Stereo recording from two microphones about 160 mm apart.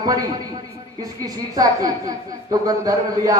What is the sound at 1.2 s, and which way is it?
A man's voice, 25° right (ahead or behind).